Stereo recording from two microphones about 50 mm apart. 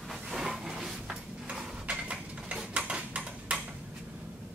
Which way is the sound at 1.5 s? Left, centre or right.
Right.